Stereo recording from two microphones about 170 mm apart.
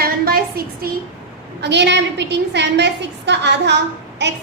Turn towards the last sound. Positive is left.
turn(degrees=-90)